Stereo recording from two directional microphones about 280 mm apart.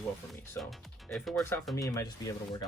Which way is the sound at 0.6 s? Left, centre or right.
Centre.